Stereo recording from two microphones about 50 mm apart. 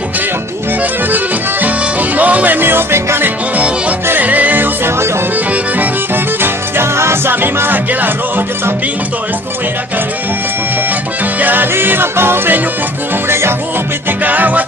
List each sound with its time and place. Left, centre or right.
1.6 s music: right
2.6 s music: right
3.2 s music: right
6.4 s music: right
7.4 s music: right
11.3 s music: right
13.2 s music: right
14.3 s music: right